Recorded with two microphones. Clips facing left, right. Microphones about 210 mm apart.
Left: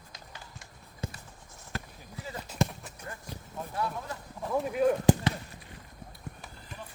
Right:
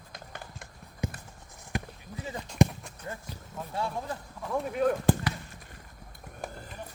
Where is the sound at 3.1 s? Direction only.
25° right (ahead or behind).